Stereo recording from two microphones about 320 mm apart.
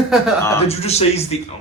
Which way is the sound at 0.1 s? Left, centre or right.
Centre.